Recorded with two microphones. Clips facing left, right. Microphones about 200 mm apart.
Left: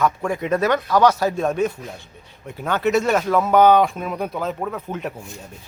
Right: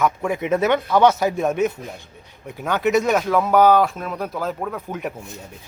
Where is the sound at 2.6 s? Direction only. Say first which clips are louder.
Even; 10° right (ahead or behind).